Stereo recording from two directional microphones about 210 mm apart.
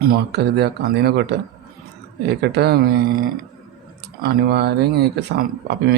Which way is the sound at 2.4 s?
50° right (ahead or behind).